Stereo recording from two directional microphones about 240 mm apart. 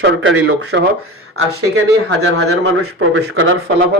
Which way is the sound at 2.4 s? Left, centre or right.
Right.